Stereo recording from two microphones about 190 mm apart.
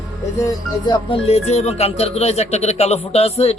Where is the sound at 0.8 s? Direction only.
25° left (ahead or behind).